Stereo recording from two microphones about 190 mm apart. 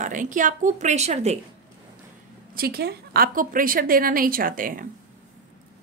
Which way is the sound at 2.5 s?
55° right (ahead or behind).